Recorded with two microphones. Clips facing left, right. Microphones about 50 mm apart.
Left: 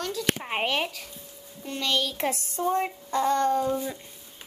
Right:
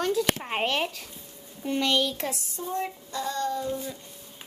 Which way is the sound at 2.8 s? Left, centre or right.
Left.